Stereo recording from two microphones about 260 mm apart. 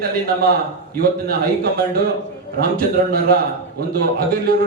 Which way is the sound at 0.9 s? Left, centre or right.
Right.